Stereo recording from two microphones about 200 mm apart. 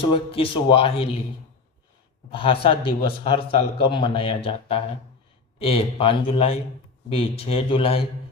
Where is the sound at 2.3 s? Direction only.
25° left (ahead or behind).